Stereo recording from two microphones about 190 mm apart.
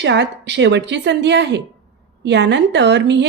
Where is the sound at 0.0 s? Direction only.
70° right (ahead or behind).